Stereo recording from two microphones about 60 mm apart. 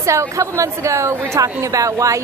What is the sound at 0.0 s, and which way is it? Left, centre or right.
A woman's voice, right.